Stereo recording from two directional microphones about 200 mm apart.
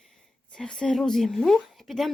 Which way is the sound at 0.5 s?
5° left (ahead or behind).